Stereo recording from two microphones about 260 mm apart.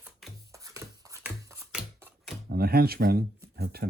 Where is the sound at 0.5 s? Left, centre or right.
Centre.